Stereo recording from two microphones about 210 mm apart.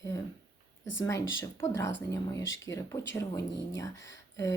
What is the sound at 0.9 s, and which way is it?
Speech, 15° left (ahead or behind).